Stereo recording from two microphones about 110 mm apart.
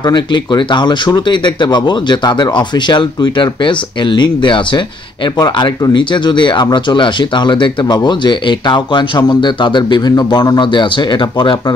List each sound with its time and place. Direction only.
0.0 s speech: 40° left (ahead or behind)